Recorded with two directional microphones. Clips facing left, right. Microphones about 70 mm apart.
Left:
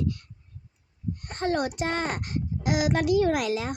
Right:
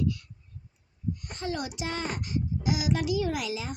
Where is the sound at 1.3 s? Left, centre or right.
Left.